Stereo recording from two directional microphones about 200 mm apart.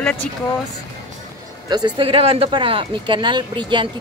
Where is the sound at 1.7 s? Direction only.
20° right (ahead or behind).